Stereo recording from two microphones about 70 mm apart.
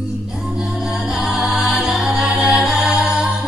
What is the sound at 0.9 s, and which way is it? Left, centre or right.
Music, centre.